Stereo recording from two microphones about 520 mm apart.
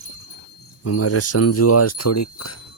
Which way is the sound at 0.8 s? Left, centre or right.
Left.